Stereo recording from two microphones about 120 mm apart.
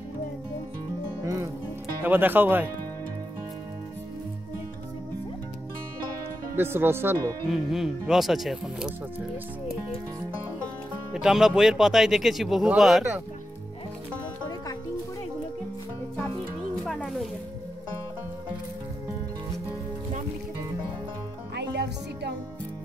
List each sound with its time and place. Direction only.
1.2 s music: 25° right (ahead or behind)
2.0 s speech: 15° right (ahead or behind)
6.5 s speech: 20° right (ahead or behind)
7.4 s speech: 5° right (ahead or behind)
11.1 s speech: 5° right (ahead or behind)
16.8 s music: 5° left (ahead or behind)